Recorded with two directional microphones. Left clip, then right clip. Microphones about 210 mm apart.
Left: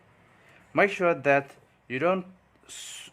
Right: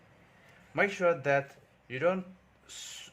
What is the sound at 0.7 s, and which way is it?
Speech, 25° left (ahead or behind).